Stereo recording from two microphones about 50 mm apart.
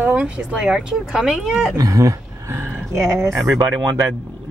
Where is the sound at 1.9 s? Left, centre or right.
Right.